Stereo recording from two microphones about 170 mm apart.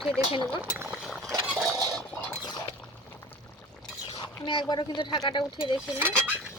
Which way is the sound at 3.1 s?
15° left (ahead or behind).